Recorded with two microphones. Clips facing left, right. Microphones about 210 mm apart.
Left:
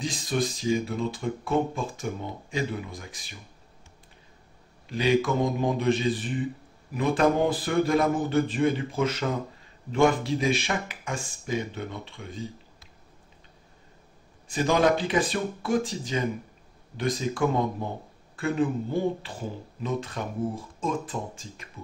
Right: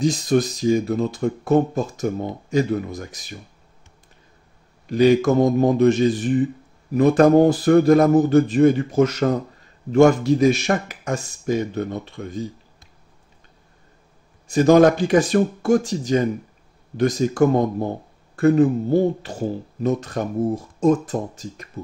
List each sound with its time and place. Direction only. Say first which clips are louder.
0.0 s speech: right 9 dB; 45° right (ahead or behind)
4.9 s speech: right 8 dB; 45° right (ahead or behind)
14.5 s speech: right 9 dB; 45° right (ahead or behind)